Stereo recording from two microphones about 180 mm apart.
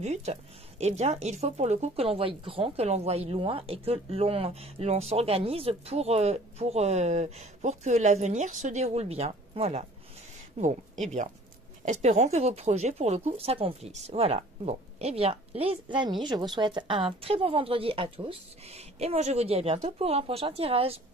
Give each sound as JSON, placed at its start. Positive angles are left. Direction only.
{"t": 0.0, "sound": "speech", "side_deg": -40}